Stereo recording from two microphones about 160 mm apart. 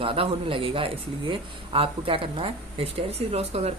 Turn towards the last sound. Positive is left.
turn(degrees=-40)  # may be behind; listen again after turning